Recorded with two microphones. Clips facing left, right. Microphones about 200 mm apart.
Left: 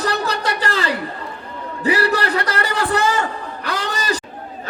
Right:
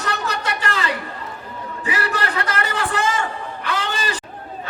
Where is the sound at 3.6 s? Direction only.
40° left (ahead or behind).